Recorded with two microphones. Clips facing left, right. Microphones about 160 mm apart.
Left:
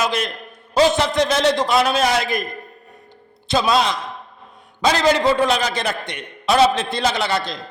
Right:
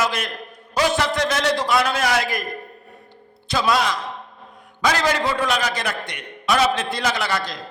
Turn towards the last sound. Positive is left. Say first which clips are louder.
# left 2 dB
turn(degrees=25)  # may be behind; listen again after turning